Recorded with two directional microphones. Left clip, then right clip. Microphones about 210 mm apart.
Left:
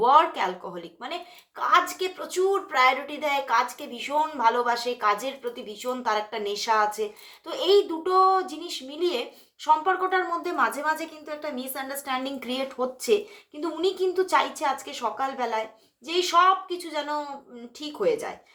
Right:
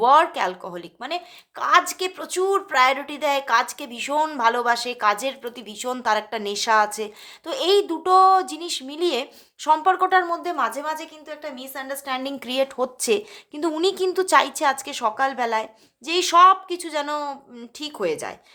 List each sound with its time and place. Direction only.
0.0 s a woman's voice: 40° right (ahead or behind)